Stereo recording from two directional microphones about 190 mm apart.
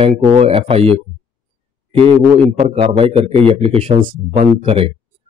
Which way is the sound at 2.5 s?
30° right (ahead or behind).